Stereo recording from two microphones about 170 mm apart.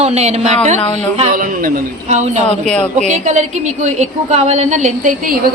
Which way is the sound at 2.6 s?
5° left (ahead or behind).